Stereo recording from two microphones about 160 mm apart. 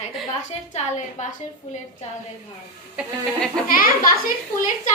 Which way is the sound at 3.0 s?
5° right (ahead or behind).